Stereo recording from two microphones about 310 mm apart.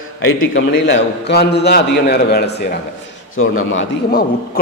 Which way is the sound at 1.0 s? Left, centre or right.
Left.